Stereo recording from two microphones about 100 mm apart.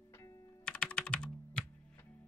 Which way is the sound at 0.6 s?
10° left (ahead or behind).